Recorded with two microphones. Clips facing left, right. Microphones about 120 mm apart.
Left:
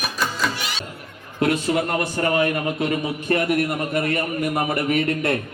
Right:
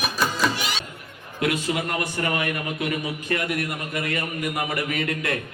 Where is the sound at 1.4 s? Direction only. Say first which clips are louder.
Left 4 dB; 35° left (ahead or behind).